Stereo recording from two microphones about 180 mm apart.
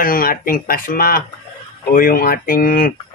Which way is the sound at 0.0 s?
55° left (ahead or behind).